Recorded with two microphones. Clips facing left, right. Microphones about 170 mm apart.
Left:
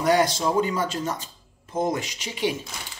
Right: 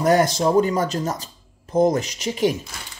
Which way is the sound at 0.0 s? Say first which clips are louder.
Right 3 dB; 45° right (ahead or behind).